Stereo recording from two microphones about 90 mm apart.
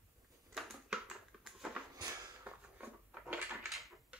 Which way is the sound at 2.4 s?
15° right (ahead or behind).